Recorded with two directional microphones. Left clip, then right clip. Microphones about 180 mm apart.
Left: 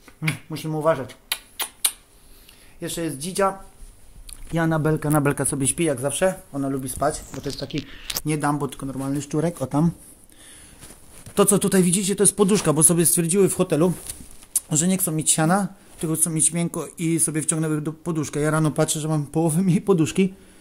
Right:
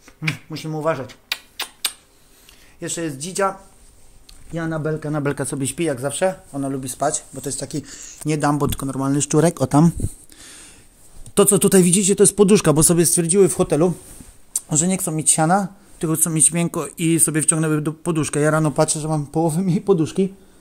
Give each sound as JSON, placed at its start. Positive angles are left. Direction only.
{"t": 0.0, "sound": "computer keyboard", "side_deg": 0}
{"t": 2.8, "sound": "speech", "side_deg": -10}
{"t": 4.5, "sound": "speech", "side_deg": 30}
{"t": 5.2, "sound": "speech", "side_deg": 5}
{"t": 7.5, "sound": "speech", "side_deg": -30}
{"t": 8.6, "sound": "speech", "side_deg": -50}
{"t": 11.3, "sound": "speech", "side_deg": -45}
{"t": 12.9, "sound": "speech", "side_deg": -10}
{"t": 16.0, "sound": "speech", "side_deg": -35}
{"t": 18.5, "sound": "speech", "side_deg": -5}